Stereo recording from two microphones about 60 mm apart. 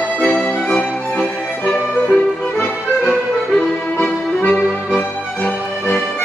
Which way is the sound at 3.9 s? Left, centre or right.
Left.